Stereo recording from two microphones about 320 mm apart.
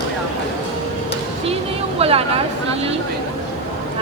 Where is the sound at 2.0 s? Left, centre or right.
Centre.